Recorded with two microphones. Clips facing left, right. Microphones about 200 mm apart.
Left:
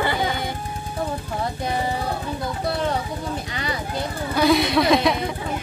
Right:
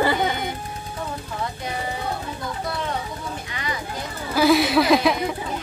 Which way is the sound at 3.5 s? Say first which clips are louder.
Left 2 dB; 35° left (ahead or behind).